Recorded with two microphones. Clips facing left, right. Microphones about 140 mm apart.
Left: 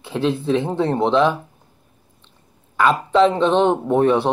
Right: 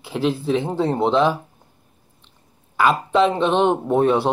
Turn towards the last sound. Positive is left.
turn(degrees=-15)  # may be behind; listen again after turning